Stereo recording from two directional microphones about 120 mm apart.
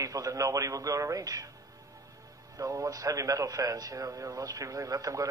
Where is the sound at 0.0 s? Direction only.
30° right (ahead or behind).